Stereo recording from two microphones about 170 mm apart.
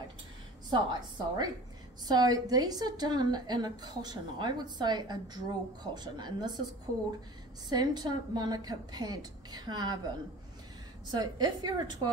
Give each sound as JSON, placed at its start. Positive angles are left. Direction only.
{"t": 0.7, "sound": "a woman's voice", "side_deg": -25}
{"t": 7.7, "sound": "a woman's voice", "side_deg": -25}